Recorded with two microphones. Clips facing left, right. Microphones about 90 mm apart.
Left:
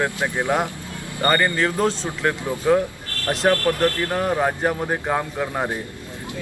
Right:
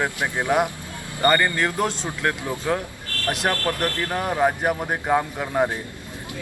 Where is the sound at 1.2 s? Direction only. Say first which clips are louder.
Even; 15° left (ahead or behind).